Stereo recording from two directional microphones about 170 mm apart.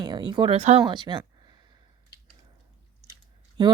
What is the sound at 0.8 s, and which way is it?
Speech, 25° right (ahead or behind).